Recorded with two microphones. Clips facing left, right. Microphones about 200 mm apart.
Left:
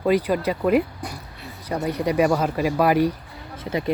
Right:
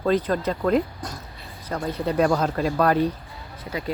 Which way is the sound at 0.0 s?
10° left (ahead or behind).